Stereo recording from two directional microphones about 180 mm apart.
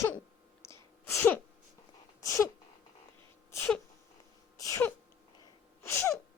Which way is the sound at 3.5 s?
10° left (ahead or behind).